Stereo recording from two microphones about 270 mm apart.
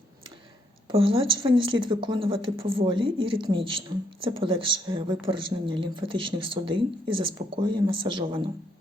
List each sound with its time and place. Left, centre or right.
0.9 s a woman's voice: centre